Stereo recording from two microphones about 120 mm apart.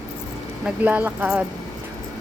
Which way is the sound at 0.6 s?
10° right (ahead or behind).